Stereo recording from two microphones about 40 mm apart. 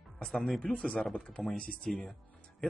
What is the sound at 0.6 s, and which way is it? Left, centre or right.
Speech, centre.